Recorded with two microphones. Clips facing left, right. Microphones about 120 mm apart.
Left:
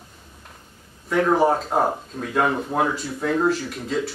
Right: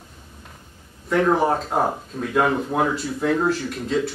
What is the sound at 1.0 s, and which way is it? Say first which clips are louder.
Speech: even; centre (ahead or behind).